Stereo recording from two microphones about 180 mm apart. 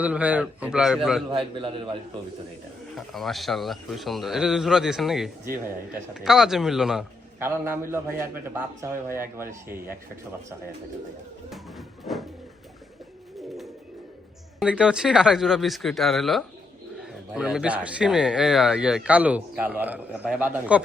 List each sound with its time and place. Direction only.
0.0 s speech: 10° right (ahead or behind)
1.5 s a man's voice: 25° right (ahead or behind)
2.9 s speech: centre (ahead or behind)
7.3 s a man's voice: 15° right (ahead or behind)
11.5 s a sound: centre (ahead or behind)
14.6 s speech: 5° right (ahead or behind)